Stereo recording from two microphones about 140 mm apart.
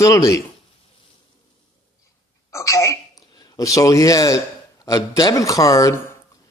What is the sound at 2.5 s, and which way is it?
A woman's voice, 20° left (ahead or behind).